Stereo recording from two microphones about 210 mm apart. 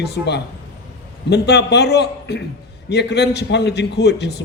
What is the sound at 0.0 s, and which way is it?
A man's voice, 50° left (ahead or behind).